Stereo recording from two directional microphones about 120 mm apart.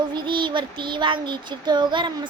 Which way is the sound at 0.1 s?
40° right (ahead or behind).